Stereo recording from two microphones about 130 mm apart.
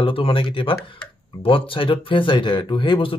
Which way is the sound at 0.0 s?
45° left (ahead or behind).